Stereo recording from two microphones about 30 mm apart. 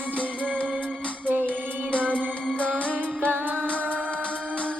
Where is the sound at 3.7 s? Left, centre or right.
Left.